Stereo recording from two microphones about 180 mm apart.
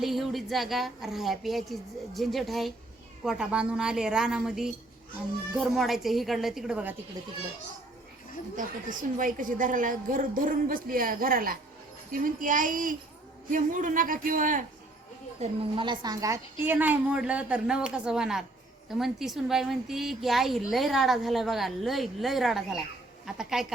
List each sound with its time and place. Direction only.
0.0 s a woman's voice: centre (ahead or behind)
8.5 s a woman's voice: 45° right (ahead or behind)
15.4 s a woman's voice: 30° right (ahead or behind); by 23.7 s 5° right (ahead or behind)